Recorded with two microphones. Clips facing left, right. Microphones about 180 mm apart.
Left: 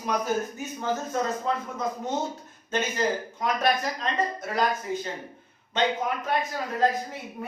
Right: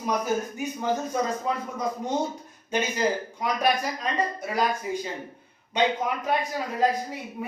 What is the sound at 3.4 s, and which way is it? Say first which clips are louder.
A man's voice: even; 10° right (ahead or behind).